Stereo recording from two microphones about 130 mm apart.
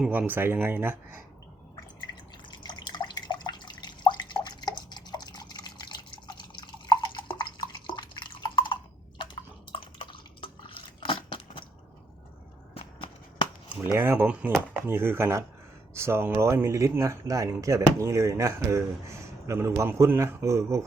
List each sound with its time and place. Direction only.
0.0 s speech: 15° right (ahead or behind)
2.5 s drip: 35° left (ahead or behind)
12.7 s a sound: 45° left (ahead or behind)
13.9 s speech: 20° right (ahead or behind)